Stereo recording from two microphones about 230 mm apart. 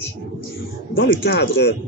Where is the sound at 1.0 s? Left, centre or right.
Left.